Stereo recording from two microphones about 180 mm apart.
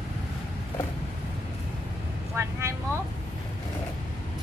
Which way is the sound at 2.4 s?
15° right (ahead or behind).